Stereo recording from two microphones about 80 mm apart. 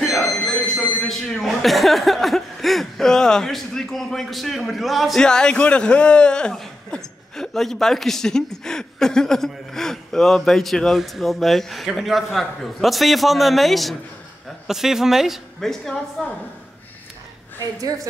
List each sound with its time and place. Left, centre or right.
0.0 s a woman's voice: centre
17.6 s a woman's voice: right